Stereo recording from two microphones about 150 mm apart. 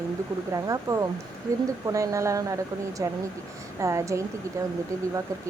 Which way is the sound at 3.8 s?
20° right (ahead or behind).